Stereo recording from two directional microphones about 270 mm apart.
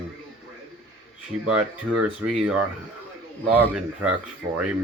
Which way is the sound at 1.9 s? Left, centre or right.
Centre.